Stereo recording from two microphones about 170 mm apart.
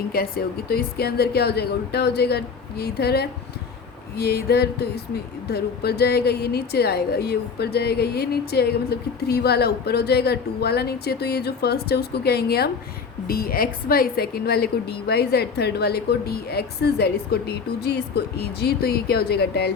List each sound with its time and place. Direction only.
0.1 s speech: 60° left (ahead or behind)